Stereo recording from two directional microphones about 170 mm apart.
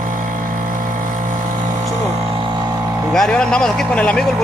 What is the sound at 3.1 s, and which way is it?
Speech, 5° left (ahead or behind).